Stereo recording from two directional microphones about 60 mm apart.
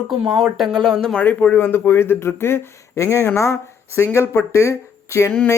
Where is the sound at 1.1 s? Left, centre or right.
Left.